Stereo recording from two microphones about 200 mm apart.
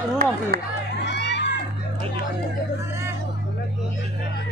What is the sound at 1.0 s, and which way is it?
Children playing, 60° left (ahead or behind).